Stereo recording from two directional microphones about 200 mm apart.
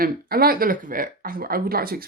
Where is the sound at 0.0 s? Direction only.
50° right (ahead or behind).